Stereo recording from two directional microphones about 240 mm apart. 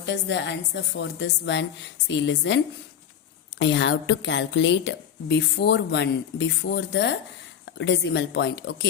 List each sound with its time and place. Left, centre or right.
0.0 s a woman's voice: left
3.6 s a woman's voice: left